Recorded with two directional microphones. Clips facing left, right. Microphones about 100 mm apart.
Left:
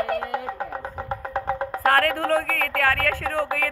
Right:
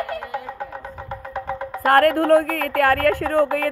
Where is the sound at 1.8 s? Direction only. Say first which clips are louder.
Right 6 dB; 15° right (ahead or behind).